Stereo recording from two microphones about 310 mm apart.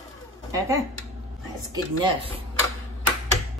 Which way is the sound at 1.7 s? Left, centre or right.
Centre.